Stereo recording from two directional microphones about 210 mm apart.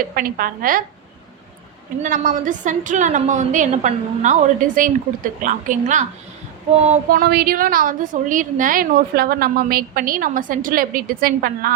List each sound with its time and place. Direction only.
0.0 s a woman's voice: 45° right (ahead or behind)
2.0 s a woman's voice: 40° right (ahead or behind)
7.2 s a woman's voice: 45° right (ahead or behind)